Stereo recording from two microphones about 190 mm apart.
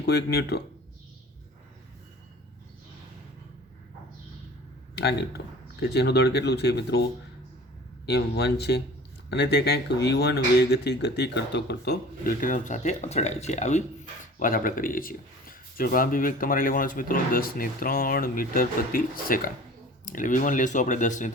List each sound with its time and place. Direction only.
0.0 s speech: 60° left (ahead or behind)
4.9 s speech: 60° left (ahead or behind)
8.0 s speech: 60° left (ahead or behind); by 13.8 s 35° left (ahead or behind)
14.3 s speech: 45° left (ahead or behind)